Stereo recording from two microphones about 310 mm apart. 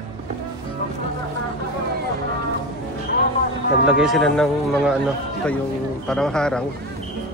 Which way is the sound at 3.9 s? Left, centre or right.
Centre.